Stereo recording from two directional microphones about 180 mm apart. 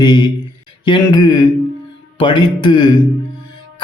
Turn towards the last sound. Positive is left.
turn(degrees=25)  # may be behind; listen again after turning